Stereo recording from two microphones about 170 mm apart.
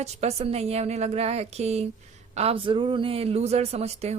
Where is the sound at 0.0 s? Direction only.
40° right (ahead or behind).